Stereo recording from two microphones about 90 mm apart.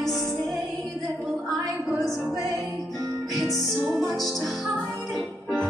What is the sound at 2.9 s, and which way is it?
Music, 45° right (ahead or behind).